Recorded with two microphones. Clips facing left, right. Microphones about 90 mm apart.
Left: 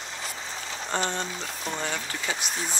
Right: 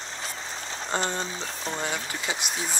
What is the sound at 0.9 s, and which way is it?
Speech, 15° right (ahead or behind).